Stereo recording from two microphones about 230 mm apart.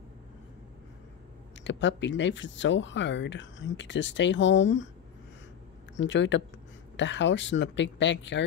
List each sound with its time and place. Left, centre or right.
1.6 s speech: left
5.9 s speech: left